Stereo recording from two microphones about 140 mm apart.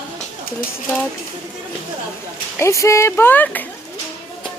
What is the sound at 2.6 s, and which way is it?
A woman's voice, 20° left (ahead or behind).